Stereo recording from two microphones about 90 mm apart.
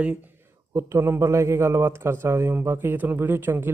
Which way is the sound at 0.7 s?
30° right (ahead or behind).